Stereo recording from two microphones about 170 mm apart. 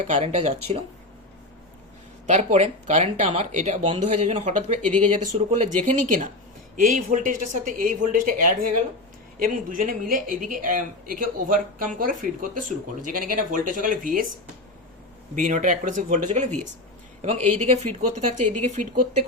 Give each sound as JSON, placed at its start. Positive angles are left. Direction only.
{"t": 0.1, "sound": "speech", "side_deg": -40}
{"t": 2.3, "sound": "speech", "side_deg": -40}
{"t": 15.4, "sound": "speech", "side_deg": -50}